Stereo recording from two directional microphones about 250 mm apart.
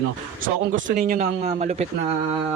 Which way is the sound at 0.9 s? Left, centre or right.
Right.